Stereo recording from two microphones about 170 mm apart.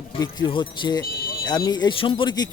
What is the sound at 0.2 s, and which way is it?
Speech, 25° left (ahead or behind).